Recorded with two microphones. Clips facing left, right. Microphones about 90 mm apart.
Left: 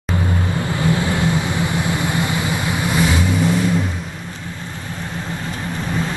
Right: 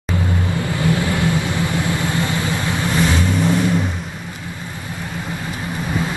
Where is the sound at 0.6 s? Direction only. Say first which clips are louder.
Even; 20° left (ahead or behind).